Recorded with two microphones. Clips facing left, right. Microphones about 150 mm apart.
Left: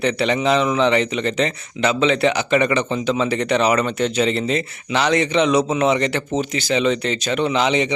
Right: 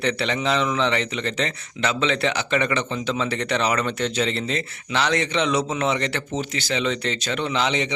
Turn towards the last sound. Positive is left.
turn(degrees=15)  # may be behind; listen again after turning